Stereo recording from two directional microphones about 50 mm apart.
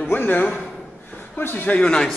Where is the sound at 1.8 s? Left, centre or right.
Centre.